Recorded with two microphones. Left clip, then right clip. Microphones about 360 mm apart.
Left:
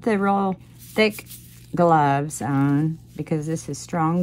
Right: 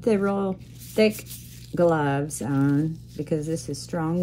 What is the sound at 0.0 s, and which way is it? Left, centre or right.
A woman's voice, left.